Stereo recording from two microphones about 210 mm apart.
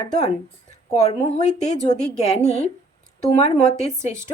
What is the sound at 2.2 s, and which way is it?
Speech, 30° left (ahead or behind).